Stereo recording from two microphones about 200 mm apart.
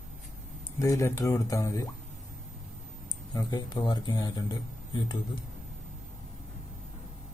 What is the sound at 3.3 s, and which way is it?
Speech, 20° left (ahead or behind).